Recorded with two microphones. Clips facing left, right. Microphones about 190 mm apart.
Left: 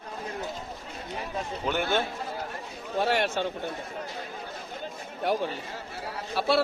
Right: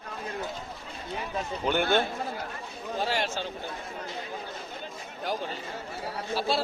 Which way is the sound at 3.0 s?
60° left (ahead or behind).